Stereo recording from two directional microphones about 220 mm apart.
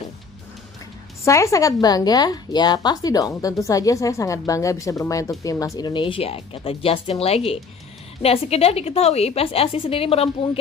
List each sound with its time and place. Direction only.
1.2 s a woman's voice: 15° left (ahead or behind)